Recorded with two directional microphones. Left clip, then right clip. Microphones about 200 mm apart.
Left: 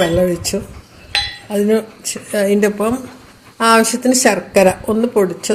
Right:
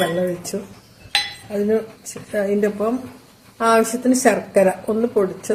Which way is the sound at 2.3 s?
50° left (ahead or behind).